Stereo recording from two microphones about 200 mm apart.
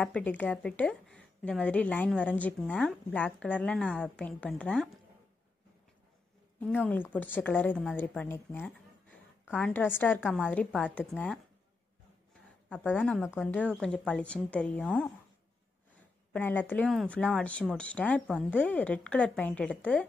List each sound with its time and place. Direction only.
0.0 s a woman's voice: 10° left (ahead or behind)
6.9 s a woman's voice: 10° left (ahead or behind)
12.6 s a woman's voice: 5° left (ahead or behind)
16.3 s a woman's voice: 10° left (ahead or behind)